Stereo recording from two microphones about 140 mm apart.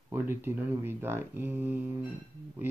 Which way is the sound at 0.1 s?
15° right (ahead or behind).